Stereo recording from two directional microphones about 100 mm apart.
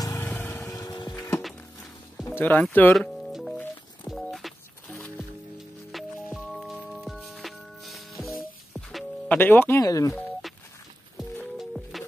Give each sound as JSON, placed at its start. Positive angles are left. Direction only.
{"t": 0.0, "sound": "lawn mower", "side_deg": 30}
{"t": 0.5, "sound": "vehicle", "side_deg": 35}
{"t": 2.2, "sound": "speech", "side_deg": 20}
{"t": 2.9, "sound": "music", "side_deg": 0}
{"t": 9.3, "sound": "speech", "side_deg": 20}
{"t": 9.8, "sound": "speech", "side_deg": 35}
{"t": 11.5, "sound": "music", "side_deg": 0}